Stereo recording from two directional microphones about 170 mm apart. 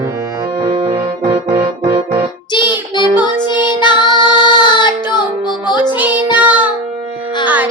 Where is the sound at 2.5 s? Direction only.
25° left (ahead or behind).